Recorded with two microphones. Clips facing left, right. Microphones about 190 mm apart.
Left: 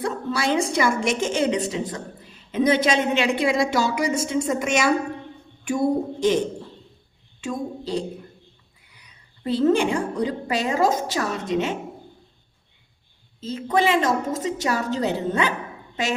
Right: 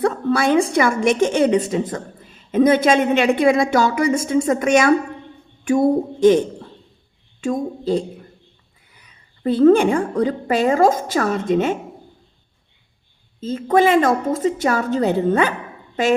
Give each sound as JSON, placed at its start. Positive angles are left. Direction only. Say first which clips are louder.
{"t": 0.0, "sound": "a woman's voice", "louder": "right 7 dB", "side_deg": -55}
{"t": 7.4, "sound": "a woman's voice", "louder": "right 7 dB", "side_deg": -50}
{"t": 9.5, "sound": "a woman's voice", "louder": "right 7 dB", "side_deg": -55}
{"t": 13.4, "sound": "a woman's voice", "louder": "right 6 dB", "side_deg": -50}